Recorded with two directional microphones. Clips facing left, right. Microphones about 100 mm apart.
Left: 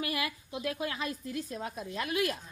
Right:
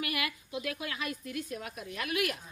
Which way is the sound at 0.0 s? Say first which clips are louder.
Left 1 dB; 30° left (ahead or behind).